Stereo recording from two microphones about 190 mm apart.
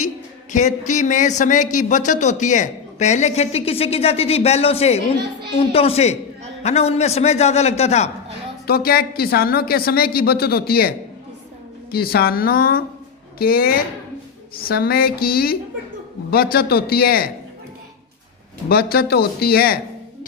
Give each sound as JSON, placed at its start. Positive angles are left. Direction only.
{"t": 0.5, "sound": "speech", "side_deg": 40}
{"t": 8.6, "sound": "a woman's voice", "side_deg": 55}
{"t": 18.7, "sound": "a woman's voice", "side_deg": 55}